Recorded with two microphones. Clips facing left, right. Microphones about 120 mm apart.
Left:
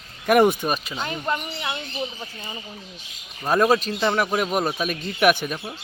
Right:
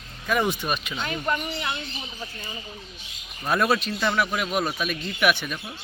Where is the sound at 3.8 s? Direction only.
35° left (ahead or behind).